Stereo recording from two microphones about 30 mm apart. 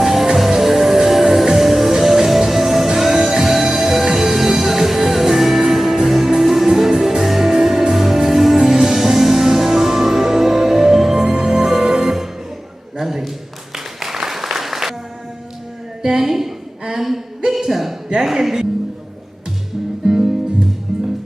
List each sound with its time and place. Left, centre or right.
0.0 s music: centre
13.0 s a sound: centre
13.7 s applause: centre
16.0 s a sound: centre
18.4 s music: centre
20.1 s music: centre
20.9 s music: centre